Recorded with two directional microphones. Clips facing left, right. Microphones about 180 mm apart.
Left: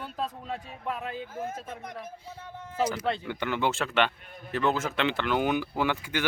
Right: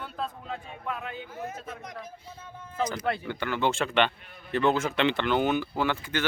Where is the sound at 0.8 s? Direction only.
35° left (ahead or behind).